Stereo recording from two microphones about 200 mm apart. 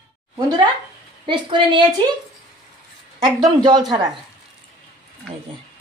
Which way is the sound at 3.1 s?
20° right (ahead or behind).